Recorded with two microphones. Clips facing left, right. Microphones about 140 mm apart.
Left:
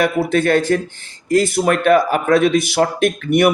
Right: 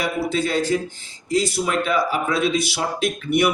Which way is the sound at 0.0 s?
60° left (ahead or behind).